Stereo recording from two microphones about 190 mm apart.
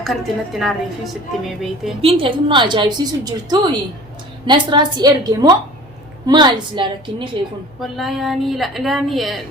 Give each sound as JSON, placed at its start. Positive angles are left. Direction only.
{"t": 0.0, "sound": "a woman's voice", "side_deg": 0}
{"t": 2.0, "sound": "a woman's voice", "side_deg": -30}
{"t": 7.8, "sound": "a woman's voice", "side_deg": 0}